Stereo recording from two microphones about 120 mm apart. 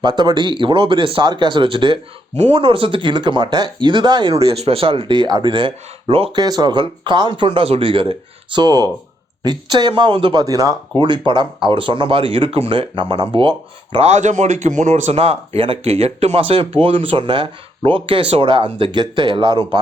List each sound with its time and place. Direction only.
0.0 s speech: 40° right (ahead or behind)
2.3 s speech: 70° right (ahead or behind)
2.6 s speech: 50° right (ahead or behind)
4.4 s speech: 60° right (ahead or behind)
6.3 s speech: 35° right (ahead or behind)
8.5 s speech: 35° right (ahead or behind)
10.4 s speech: 30° right (ahead or behind)
11.3 s speech: 40° right (ahead or behind)
14.0 s speech: 75° right (ahead or behind); by 19.8 s 40° right (ahead or behind)